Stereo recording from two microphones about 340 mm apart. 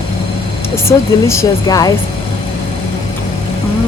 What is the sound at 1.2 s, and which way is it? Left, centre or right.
Speech, centre.